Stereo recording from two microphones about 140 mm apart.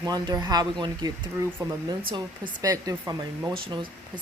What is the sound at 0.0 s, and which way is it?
A woman's voice, 25° right (ahead or behind).